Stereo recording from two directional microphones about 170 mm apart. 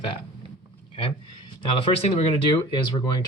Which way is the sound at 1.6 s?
30° left (ahead or behind).